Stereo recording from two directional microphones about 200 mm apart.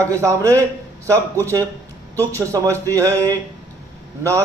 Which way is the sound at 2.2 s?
15° right (ahead or behind).